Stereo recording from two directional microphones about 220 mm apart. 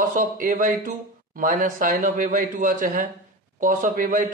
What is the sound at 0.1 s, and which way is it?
Speech, 35° right (ahead or behind).